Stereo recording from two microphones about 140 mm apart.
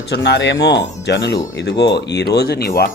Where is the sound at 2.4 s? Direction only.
90° left.